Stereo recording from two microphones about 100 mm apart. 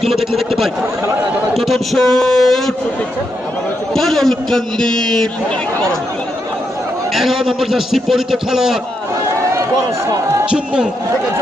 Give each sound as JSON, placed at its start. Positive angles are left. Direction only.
{"t": 0.0, "sound": "a man's voice", "side_deg": 0}
{"t": 3.9, "sound": "a man's voice", "side_deg": 0}
{"t": 7.1, "sound": "a man's voice", "side_deg": -5}
{"t": 10.4, "sound": "a man's voice", "side_deg": -10}